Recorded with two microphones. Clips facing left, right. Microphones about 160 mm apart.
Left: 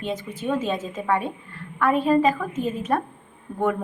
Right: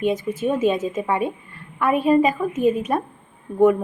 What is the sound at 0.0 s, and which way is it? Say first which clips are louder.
A woman's voice: right 7 dB; 10° right (ahead or behind).